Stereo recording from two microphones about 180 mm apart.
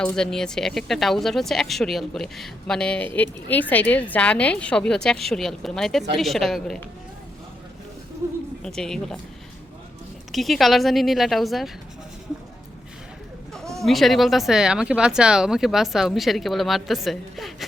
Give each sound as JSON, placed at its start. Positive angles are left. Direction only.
{"t": 0.0, "sound": "speech", "side_deg": 5}
{"t": 8.2, "sound": "a sound", "side_deg": -15}
{"t": 8.6, "sound": "speech", "side_deg": 5}
{"t": 10.3, "sound": "speech", "side_deg": 0}
{"t": 13.7, "sound": "speech", "side_deg": 0}